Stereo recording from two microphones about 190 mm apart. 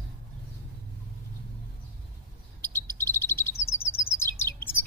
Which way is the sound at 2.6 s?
10° left (ahead or behind).